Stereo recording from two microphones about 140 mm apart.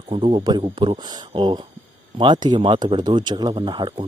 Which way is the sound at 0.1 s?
40° right (ahead or behind).